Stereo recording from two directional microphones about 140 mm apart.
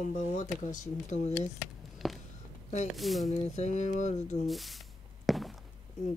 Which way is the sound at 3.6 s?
60° left (ahead or behind).